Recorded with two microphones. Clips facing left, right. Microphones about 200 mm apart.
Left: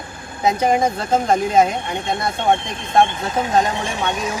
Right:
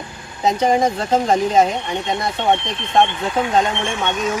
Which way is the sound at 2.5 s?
50° left (ahead or behind).